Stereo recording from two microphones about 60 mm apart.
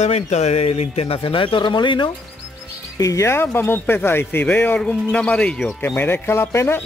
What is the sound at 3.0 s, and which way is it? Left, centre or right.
Speech, left.